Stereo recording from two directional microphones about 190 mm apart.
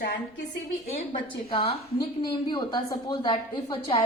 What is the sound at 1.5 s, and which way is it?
A woman's voice, 25° left (ahead or behind).